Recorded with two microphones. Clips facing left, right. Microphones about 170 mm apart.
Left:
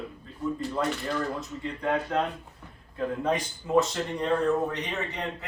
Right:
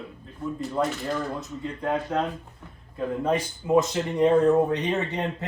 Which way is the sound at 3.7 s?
20° right (ahead or behind).